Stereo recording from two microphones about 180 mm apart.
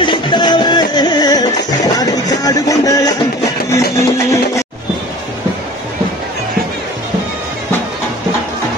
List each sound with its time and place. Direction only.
0.0 s music: 25° left (ahead or behind)